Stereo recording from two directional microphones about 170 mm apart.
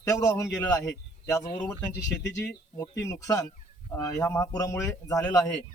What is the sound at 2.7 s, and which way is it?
A man's voice, 15° left (ahead or behind).